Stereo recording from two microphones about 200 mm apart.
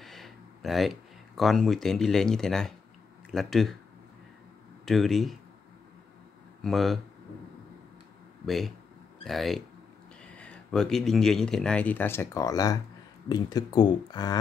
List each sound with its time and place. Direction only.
0.0 s speech: centre (ahead or behind)
4.8 s speech: centre (ahead or behind)
6.6 s speech: centre (ahead or behind)
8.5 s speech: centre (ahead or behind); by 14.4 s 20° left (ahead or behind)